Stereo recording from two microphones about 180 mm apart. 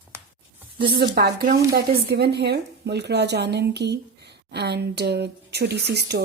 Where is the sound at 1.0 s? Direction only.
60° right (ahead or behind).